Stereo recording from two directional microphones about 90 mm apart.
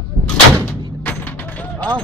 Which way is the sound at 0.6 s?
20° left (ahead or behind).